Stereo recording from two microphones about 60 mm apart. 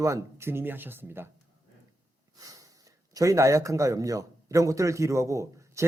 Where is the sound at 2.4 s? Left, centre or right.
Right.